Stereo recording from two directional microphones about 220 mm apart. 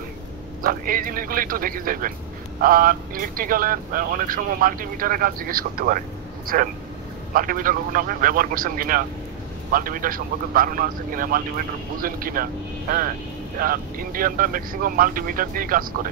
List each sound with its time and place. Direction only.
0.6 s speech: 40° right (ahead or behind)
13.6 s speech: 40° right (ahead or behind)